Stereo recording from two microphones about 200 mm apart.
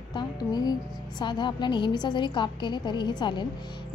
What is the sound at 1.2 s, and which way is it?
A woman's voice, 20° left (ahead or behind).